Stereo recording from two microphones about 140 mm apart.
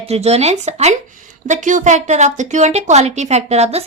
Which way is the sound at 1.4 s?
65° right (ahead or behind).